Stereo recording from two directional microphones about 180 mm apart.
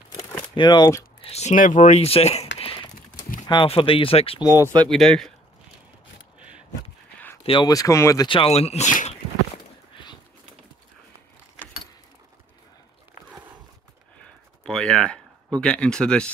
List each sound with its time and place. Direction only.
0.4 s speech: 25° left (ahead or behind)
1.2 s speech: 35° left (ahead or behind)
2.6 s a sound: 30° left (ahead or behind)
3.4 s speech: 30° left (ahead or behind)
4.8 s speech: centre (ahead or behind)
7.4 s speech: 25° left (ahead or behind); by 9.1 s 40° left (ahead or behind)
14.6 s a sound: 5° left (ahead or behind)